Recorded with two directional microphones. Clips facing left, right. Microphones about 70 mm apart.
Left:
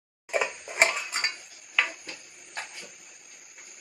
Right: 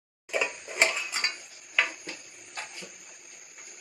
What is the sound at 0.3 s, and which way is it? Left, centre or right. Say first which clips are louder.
Tick-tock: left 2 dB; left.